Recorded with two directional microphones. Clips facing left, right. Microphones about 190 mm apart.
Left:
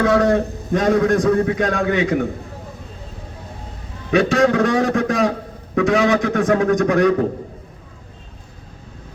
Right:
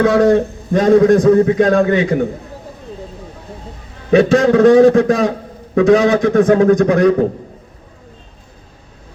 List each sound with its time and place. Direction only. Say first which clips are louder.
0.0 s a man's voice: right 4 dB; 30° right (ahead or behind)
4.1 s a man's voice: right 5 dB; 35° right (ahead or behind)